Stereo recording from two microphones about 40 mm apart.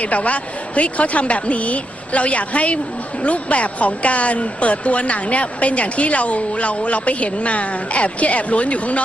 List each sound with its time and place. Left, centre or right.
0.0 s a woman's voice: left